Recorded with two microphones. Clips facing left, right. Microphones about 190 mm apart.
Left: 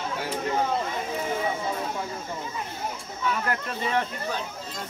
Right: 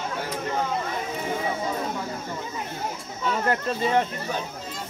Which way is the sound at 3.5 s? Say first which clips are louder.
Right 4 dB; 25° right (ahead or behind).